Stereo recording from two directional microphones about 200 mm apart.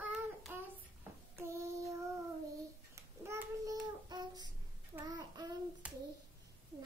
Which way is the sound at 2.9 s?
15° right (ahead or behind).